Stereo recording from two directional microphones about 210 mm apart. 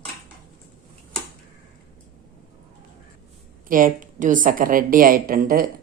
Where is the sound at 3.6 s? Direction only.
40° right (ahead or behind).